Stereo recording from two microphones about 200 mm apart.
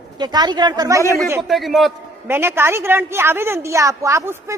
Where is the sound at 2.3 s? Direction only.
10° right (ahead or behind).